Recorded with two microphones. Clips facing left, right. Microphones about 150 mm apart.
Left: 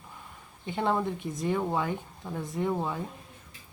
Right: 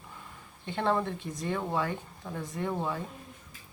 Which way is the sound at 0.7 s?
10° left (ahead or behind).